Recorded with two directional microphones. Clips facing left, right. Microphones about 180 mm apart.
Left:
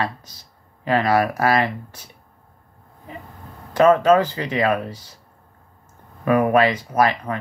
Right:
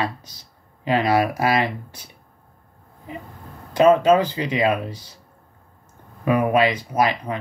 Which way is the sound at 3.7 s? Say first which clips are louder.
Even; 20° right (ahead or behind).